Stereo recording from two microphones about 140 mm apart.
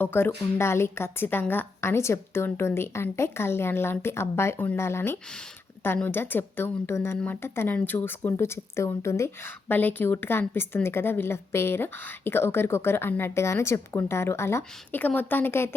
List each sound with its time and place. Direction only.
0.0 s speech: 15° left (ahead or behind)